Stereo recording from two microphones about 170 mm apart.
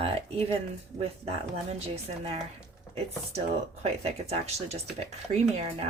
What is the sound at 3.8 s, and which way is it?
A woman's voice, 40° right (ahead or behind).